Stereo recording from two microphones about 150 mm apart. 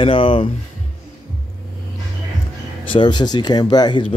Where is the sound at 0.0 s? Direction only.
35° left (ahead or behind).